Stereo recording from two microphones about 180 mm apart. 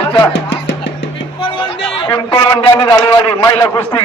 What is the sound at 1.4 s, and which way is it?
Music, 30° left (ahead or behind).